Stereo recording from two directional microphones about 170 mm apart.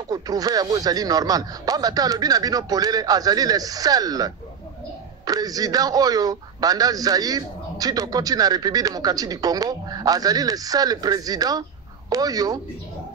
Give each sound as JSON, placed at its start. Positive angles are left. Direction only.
{"t": 0.1, "sound": "a man's voice", "side_deg": -20}